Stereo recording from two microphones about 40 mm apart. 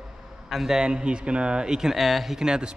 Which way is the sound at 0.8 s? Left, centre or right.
Right.